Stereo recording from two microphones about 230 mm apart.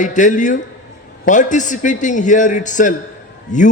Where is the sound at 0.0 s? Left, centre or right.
Left.